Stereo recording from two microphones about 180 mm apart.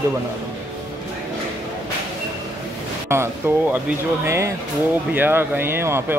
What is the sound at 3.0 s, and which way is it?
Speech, 15° right (ahead or behind).